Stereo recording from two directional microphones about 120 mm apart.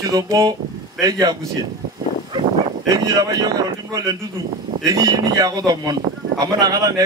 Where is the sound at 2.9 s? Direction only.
30° right (ahead or behind).